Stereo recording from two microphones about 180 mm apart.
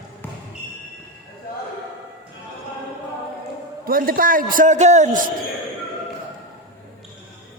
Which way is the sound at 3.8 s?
55° right (ahead or behind).